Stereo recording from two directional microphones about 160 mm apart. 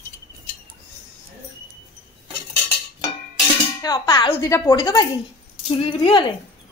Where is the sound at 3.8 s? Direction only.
25° left (ahead or behind).